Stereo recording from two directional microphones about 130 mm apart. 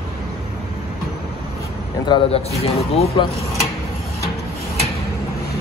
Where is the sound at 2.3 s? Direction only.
50° left (ahead or behind).